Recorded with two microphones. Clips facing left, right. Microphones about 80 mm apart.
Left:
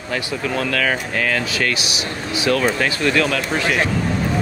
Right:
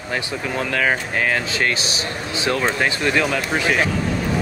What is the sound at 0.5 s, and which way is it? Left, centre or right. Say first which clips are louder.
Speech: even; right.